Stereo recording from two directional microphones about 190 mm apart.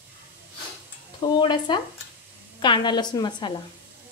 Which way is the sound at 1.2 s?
25° left (ahead or behind).